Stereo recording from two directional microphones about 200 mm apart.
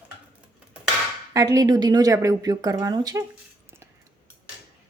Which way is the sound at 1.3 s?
20° right (ahead or behind).